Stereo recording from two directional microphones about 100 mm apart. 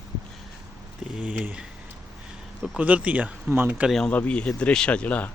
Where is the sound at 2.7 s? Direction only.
15° right (ahead or behind).